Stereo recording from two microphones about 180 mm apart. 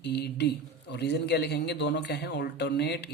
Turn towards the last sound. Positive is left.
turn(degrees=70)  # may be behind; listen again after turning